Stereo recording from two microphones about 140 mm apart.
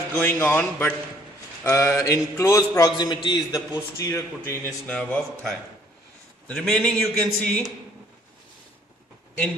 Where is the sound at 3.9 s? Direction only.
20° left (ahead or behind).